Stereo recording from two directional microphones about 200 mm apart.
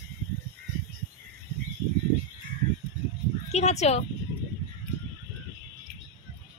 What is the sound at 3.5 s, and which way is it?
Speech, 35° left (ahead or behind).